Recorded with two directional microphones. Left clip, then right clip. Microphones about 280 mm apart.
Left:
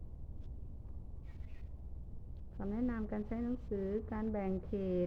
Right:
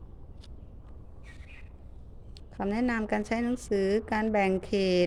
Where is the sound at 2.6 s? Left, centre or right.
Right.